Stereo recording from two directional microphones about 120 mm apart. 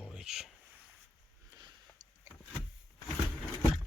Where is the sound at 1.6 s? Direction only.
35° right (ahead or behind).